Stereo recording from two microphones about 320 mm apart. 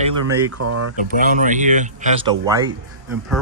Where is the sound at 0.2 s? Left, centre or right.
Right.